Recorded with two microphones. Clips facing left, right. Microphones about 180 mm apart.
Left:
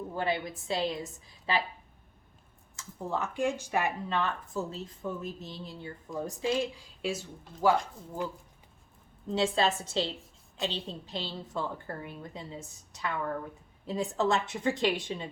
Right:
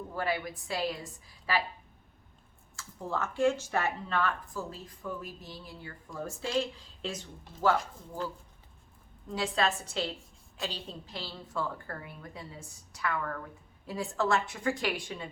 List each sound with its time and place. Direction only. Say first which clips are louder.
0.1 s a woman's voice: left 1 dB; 25° left (ahead or behind)
2.7 s speech: left 1 dB; 15° left (ahead or behind)
9.3 s a woman's voice: left 3 dB; 25° left (ahead or behind)